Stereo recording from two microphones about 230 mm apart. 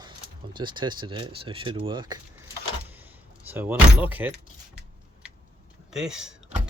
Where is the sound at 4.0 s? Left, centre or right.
Centre.